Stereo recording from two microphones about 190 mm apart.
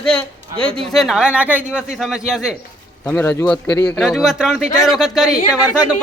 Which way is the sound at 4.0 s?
Centre (ahead or behind).